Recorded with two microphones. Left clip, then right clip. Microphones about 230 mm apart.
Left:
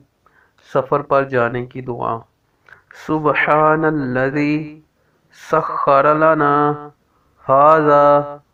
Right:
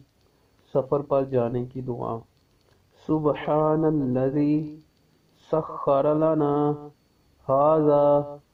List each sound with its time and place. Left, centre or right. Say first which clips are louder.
0.7 s speech: left 7 dB; left